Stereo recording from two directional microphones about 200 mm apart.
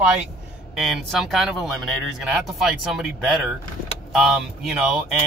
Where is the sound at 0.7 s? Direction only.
Centre (ahead or behind).